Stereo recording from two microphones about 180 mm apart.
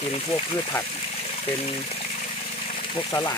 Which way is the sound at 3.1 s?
15° left (ahead or behind).